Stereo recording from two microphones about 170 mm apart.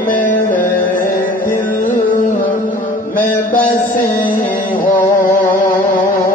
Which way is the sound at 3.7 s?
50° left (ahead or behind).